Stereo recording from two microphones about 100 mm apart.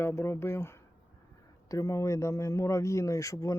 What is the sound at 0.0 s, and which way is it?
Speech, 25° left (ahead or behind).